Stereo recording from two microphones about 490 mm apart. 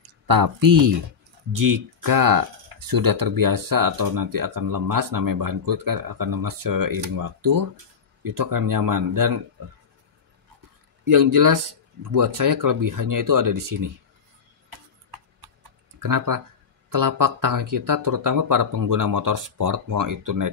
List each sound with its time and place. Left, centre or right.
0.3 s speech: right
11.1 s speech: right
14.7 s a sound: right
16.0 s speech: right